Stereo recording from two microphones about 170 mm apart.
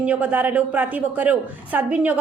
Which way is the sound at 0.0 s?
5° right (ahead or behind).